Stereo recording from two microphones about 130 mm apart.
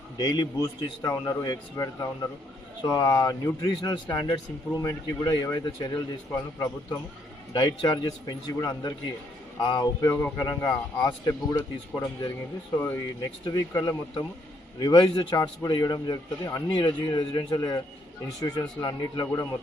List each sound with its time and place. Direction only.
0.2 s a man's voice: 30° left (ahead or behind)
7.5 s a man's voice: 35° left (ahead or behind); by 10.3 s 20° left (ahead or behind)
10.3 s a man's voice: 30° left (ahead or behind)
12.7 s speech: 15° left (ahead or behind)
13.4 s a man's voice: 30° left (ahead or behind)